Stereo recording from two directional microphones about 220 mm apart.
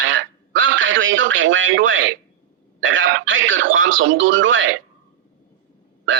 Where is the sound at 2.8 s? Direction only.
60° right (ahead or behind).